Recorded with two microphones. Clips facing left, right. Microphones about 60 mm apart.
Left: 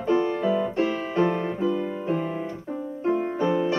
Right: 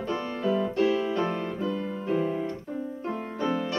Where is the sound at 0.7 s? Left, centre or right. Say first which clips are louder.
Left 1 dB; left.